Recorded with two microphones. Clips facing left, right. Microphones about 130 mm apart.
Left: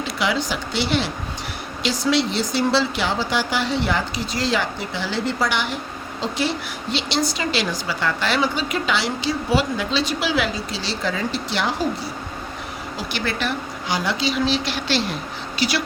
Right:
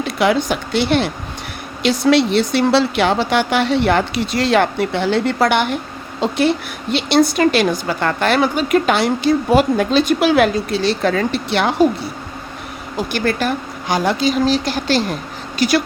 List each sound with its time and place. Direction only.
0.0 s speech: 55° right (ahead or behind)
13.0 s a woman's voice: 50° right (ahead or behind)